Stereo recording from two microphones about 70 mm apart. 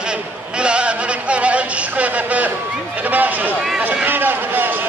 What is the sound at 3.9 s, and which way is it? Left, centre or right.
Run, right.